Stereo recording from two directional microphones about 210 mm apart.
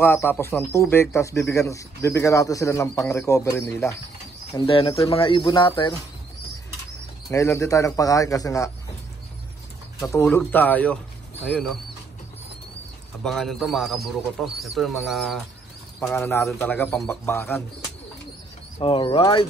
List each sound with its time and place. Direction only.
0.0 s speech: 10° left (ahead or behind)
4.6 s speech: 25° left (ahead or behind)
7.2 s speech: 15° left (ahead or behind)
9.9 s speech: 15° left (ahead or behind)
13.2 s speech: 5° left (ahead or behind)
18.8 s speech: 25° left (ahead or behind)